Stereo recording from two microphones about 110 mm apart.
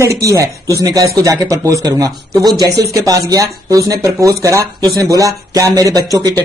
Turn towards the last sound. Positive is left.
turn(degrees=-35)  # may be behind; listen again after turning